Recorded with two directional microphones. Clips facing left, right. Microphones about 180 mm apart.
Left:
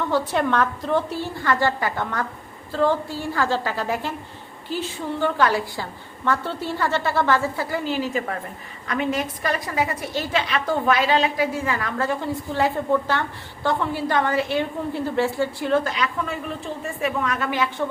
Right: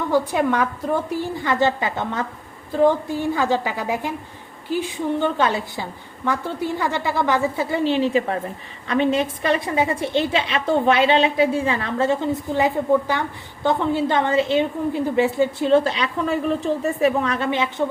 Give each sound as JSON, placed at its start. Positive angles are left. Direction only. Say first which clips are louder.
{"t": 0.1, "sound": "a woman's voice", "louder": "right 4 dB", "side_deg": -10}